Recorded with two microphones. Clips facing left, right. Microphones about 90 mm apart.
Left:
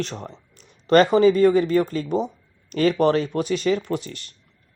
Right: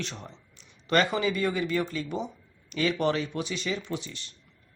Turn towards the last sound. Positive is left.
turn(degrees=50)  # may be behind; listen again after turning